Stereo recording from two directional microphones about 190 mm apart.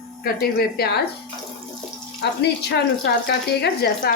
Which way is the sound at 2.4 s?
60° left (ahead or behind).